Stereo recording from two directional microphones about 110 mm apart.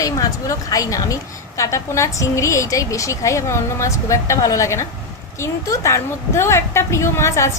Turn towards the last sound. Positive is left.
turn(degrees=25)  # may be behind; listen again after turning